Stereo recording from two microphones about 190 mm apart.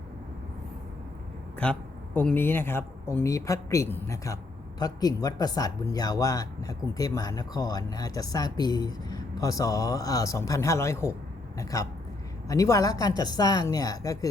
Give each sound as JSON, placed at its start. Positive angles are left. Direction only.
{"t": 1.6, "sound": "speech", "side_deg": 5}